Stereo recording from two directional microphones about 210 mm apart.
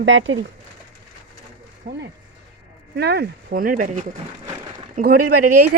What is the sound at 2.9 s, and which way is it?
Speech, 50° right (ahead or behind).